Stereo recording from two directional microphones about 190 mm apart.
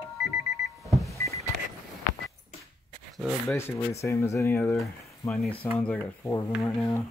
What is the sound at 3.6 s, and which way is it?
Speech, 15° left (ahead or behind).